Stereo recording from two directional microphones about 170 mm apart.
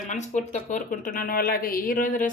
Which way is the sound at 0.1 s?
45° left (ahead or behind).